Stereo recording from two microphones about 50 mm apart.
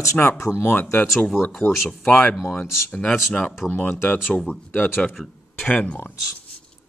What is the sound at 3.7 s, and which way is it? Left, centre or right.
Speech, left.